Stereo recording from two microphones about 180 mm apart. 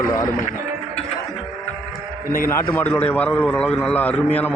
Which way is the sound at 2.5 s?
15° left (ahead or behind).